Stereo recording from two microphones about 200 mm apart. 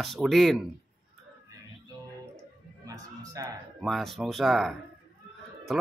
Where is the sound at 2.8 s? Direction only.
20° right (ahead or behind).